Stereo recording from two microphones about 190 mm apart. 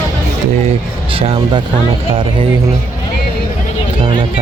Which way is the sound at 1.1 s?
30° right (ahead or behind).